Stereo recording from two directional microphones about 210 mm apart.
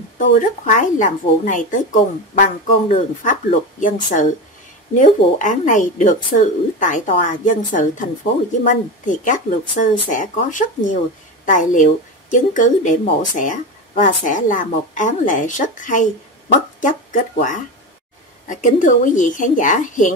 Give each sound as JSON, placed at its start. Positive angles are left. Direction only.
{"t": 0.4, "sound": "speech", "side_deg": 35}